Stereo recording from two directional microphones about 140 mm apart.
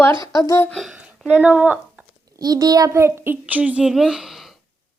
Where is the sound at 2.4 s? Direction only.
25° right (ahead or behind); by 4.6 s centre (ahead or behind).